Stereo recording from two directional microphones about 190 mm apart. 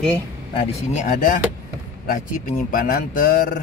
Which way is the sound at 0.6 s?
40° left (ahead or behind).